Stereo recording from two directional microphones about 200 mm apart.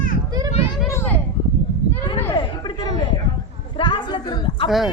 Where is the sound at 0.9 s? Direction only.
10° left (ahead or behind).